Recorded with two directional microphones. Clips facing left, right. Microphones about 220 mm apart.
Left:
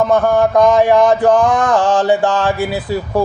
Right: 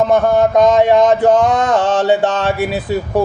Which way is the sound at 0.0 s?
20° right (ahead or behind).